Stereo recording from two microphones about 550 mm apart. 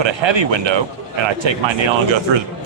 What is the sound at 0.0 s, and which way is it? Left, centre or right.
Speech, right.